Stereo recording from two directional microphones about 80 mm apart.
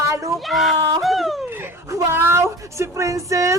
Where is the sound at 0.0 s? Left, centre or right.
Right.